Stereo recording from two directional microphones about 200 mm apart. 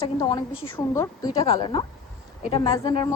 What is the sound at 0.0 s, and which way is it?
A woman's voice, 20° left (ahead or behind).